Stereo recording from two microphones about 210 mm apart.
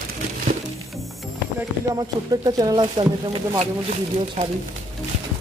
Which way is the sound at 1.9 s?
20° right (ahead or behind).